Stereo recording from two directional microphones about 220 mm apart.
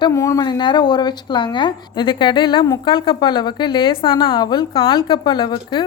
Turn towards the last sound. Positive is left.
turn(degrees=20)  # may be behind; listen again after turning